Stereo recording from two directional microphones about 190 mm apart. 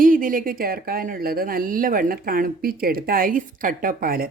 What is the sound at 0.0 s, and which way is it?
Speech, 45° right (ahead or behind).